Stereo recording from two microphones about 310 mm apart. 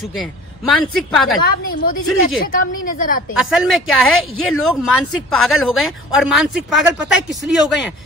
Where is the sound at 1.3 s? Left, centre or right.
Left.